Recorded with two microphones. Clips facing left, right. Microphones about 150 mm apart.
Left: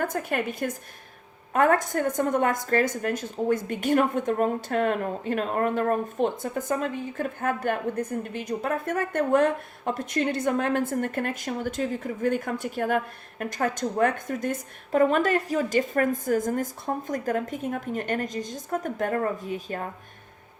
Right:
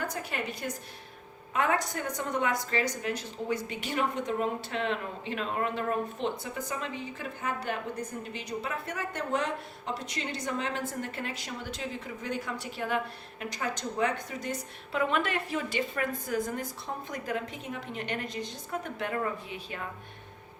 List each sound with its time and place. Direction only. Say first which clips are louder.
0.0 s a woman's voice: left 7 dB; 50° left (ahead or behind)